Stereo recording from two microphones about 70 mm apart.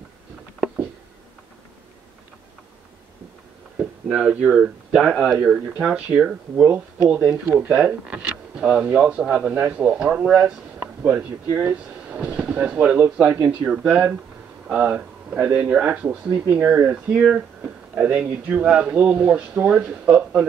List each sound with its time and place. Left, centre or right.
4.1 s speech: centre
7.4 s speech: right
7.7 s speech: centre
10.8 s a sound: right
11.4 s speech: right
11.7 s speech: centre
17.6 s a sound: right
18.6 s speech: centre